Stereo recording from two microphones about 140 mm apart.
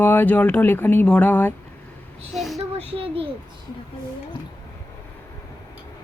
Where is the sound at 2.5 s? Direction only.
45° right (ahead or behind).